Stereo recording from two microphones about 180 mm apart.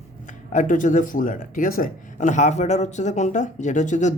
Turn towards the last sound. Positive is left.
turn(degrees=40)  # may be behind; listen again after turning